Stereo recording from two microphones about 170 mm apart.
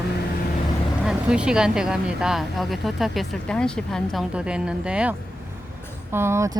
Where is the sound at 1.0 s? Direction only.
5° right (ahead or behind).